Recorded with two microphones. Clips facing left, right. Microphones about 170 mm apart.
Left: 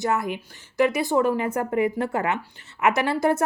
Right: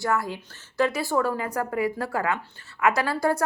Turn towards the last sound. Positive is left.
turn(degrees=20)  # may be behind; listen again after turning